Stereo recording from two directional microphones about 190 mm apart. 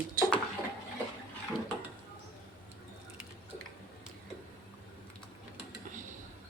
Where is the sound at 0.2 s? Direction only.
50° right (ahead or behind).